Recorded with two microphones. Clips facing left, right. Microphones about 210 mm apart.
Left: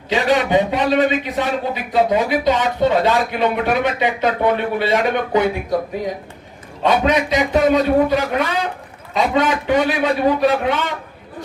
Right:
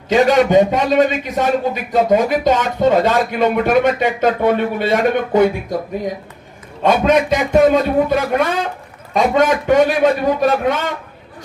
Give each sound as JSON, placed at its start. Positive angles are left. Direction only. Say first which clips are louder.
{"t": 0.1, "sound": "a man's voice", "louder": "right 5 dB", "side_deg": -45}
{"t": 6.8, "sound": "a man's voice", "louder": "right 3 dB", "side_deg": -50}